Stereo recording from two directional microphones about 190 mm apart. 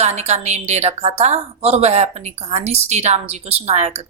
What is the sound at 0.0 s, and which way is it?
A woman's voice, 35° right (ahead or behind).